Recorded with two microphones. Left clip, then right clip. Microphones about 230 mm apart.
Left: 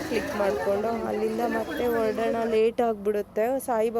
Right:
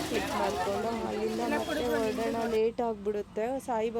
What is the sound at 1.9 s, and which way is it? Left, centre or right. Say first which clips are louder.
Speech: left 7 dB; centre.